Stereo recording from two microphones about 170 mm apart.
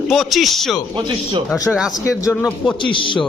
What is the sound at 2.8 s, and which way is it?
Speech, 30° left (ahead or behind).